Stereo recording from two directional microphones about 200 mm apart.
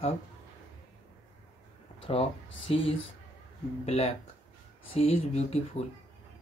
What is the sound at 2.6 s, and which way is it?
Speech, 25° left (ahead or behind).